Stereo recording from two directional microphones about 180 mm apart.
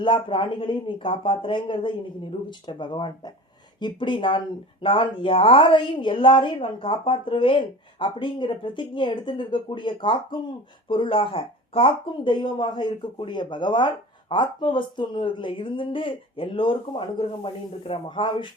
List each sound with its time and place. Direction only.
0.0 s speech: 25° left (ahead or behind)